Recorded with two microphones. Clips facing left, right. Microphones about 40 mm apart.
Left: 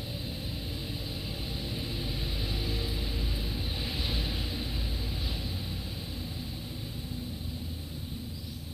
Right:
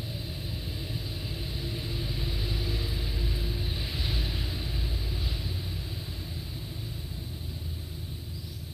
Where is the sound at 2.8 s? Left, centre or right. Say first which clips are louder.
Even; centre.